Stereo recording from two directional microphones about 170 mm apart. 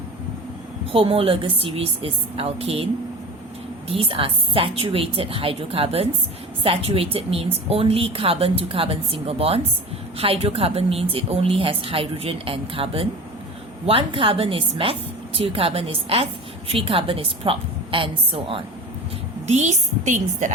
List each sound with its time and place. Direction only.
0.9 s a woman's voice: 35° right (ahead or behind)
19.5 s a woman's voice: 45° right (ahead or behind)